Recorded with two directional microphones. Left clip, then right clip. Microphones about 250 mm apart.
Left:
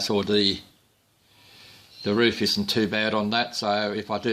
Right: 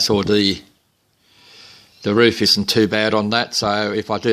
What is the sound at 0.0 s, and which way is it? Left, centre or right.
Speech, right.